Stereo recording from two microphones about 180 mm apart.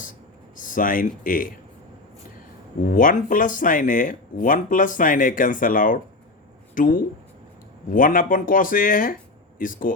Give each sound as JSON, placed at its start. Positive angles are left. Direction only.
{"t": 0.5, "sound": "speech", "side_deg": 50}
{"t": 2.8, "sound": "speech", "side_deg": 50}